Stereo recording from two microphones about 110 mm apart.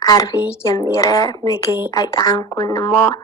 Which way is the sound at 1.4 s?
40° right (ahead or behind).